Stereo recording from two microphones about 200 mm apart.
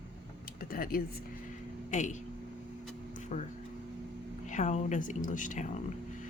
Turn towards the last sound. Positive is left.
turn(degrees=40)  # may be behind; listen again after turning